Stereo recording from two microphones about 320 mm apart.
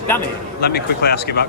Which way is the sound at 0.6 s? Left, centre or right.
Left.